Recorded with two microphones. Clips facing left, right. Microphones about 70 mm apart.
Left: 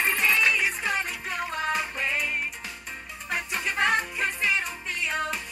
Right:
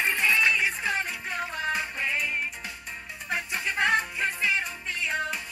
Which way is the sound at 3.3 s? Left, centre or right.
Left.